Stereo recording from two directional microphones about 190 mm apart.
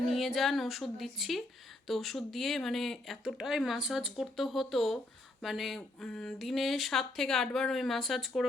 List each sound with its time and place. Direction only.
0.1 s speech: centre (ahead or behind)